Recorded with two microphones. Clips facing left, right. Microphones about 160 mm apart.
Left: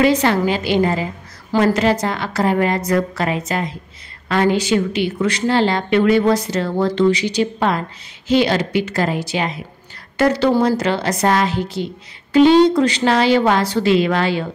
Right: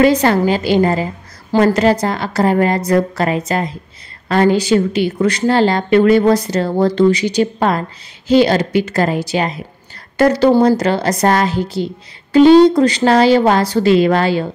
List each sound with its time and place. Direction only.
0.0 s a woman's voice: 40° right (ahead or behind)